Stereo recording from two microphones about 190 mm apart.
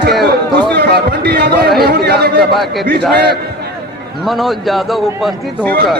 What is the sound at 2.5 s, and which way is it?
Speech, centre (ahead or behind).